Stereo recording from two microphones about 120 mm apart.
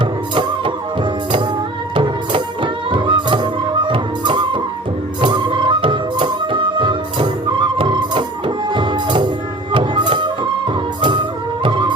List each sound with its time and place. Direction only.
0.0 s music: 45° right (ahead or behind)
2.0 s music: 45° right (ahead or behind)